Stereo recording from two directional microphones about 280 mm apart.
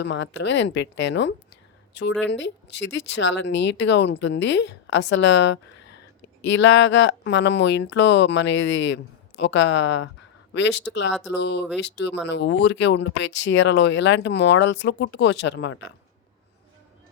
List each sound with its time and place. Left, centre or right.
0.0 s speech: left